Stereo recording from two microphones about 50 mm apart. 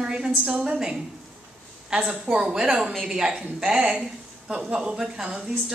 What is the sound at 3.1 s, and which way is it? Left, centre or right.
Speech, centre.